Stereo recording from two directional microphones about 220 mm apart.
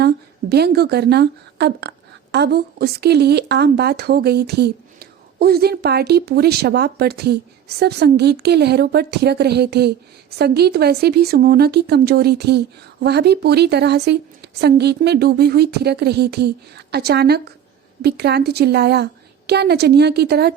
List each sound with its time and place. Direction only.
0.5 s a woman's voice: 45° right (ahead or behind)